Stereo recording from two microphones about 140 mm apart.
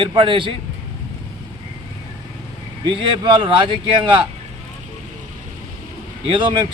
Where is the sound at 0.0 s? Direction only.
35° right (ahead or behind).